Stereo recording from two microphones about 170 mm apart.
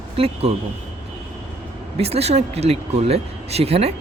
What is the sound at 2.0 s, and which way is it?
Speech, 35° right (ahead or behind).